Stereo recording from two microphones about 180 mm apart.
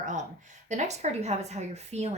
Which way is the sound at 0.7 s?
40° right (ahead or behind).